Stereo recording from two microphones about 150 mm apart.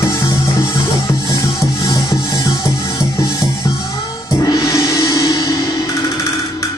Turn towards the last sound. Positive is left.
turn(degrees=25)  # may be behind; listen again after turning